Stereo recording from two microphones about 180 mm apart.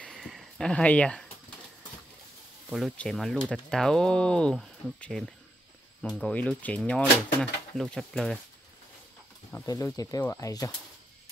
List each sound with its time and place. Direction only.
0.0 s a sound: 5° left (ahead or behind)
2.7 s speech: centre (ahead or behind)
9.5 s speech: 15° left (ahead or behind)